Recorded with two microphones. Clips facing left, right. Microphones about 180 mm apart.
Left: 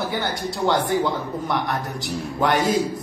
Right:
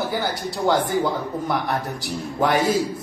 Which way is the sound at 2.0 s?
Centre (ahead or behind).